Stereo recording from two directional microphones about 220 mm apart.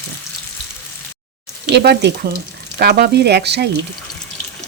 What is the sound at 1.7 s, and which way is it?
Speech, 50° right (ahead or behind).